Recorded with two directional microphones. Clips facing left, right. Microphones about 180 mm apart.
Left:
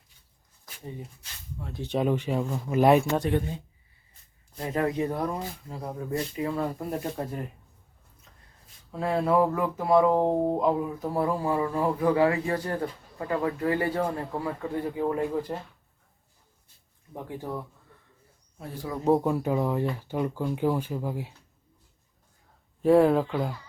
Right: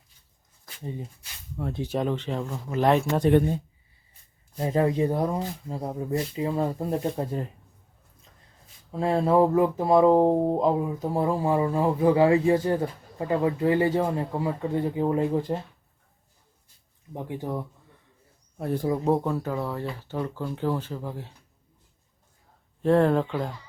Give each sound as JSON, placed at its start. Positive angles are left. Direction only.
{"t": 2.0, "sound": "speech", "side_deg": 10}
{"t": 4.5, "sound": "speech", "side_deg": -30}
{"t": 8.9, "sound": "speech", "side_deg": -25}
{"t": 17.2, "sound": "speech", "side_deg": -20}
{"t": 18.5, "sound": "a man's voice", "side_deg": -55}
{"t": 19.2, "sound": "speech", "side_deg": 15}
{"t": 22.8, "sound": "speech", "side_deg": 5}